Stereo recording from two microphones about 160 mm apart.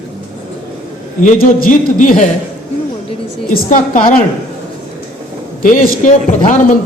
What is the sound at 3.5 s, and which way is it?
Speech, 55° left (ahead or behind).